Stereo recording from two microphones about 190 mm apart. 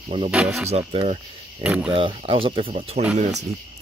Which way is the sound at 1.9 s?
30° right (ahead or behind).